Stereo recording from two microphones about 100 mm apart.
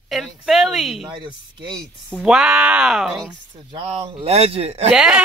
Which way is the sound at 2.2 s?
5° right (ahead or behind).